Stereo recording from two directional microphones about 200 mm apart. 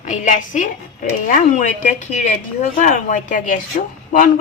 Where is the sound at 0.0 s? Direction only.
40° left (ahead or behind).